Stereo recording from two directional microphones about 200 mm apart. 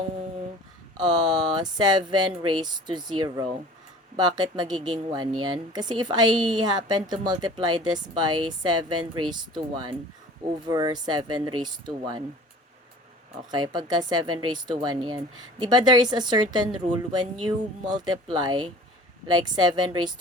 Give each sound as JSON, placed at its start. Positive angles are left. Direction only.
{"t": 0.9, "sound": "a woman's voice", "side_deg": -20}
{"t": 9.0, "sound": "speech", "side_deg": -90}
{"t": 9.3, "sound": "a woman's voice", "side_deg": -20}
{"t": 13.5, "sound": "a woman's voice", "side_deg": -20}